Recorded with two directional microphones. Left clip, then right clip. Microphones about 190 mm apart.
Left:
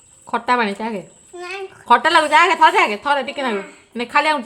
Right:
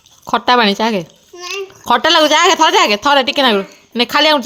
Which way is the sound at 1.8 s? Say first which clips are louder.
Right 3 dB; 40° right (ahead or behind).